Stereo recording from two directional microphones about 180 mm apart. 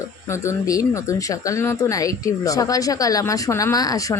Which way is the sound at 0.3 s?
15° left (ahead or behind).